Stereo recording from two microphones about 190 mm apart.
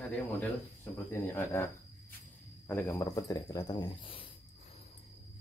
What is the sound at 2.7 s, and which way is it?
Speech, 15° left (ahead or behind).